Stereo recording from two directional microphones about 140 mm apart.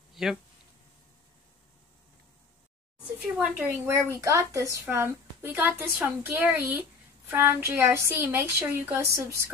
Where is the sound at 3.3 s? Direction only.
15° right (ahead or behind).